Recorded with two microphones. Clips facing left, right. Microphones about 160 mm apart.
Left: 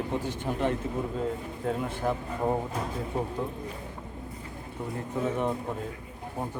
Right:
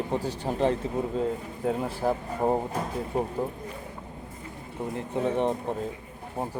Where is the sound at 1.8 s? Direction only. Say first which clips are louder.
Right 2 dB; 35° right (ahead or behind).